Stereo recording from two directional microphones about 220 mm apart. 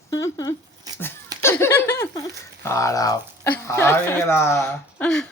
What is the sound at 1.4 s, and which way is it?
Speech, 10° left (ahead or behind).